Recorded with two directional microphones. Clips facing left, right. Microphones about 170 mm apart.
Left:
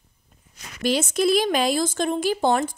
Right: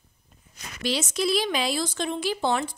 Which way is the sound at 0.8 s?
50° left (ahead or behind).